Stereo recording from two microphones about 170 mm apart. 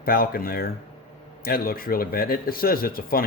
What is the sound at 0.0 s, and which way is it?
Speech, 60° left (ahead or behind).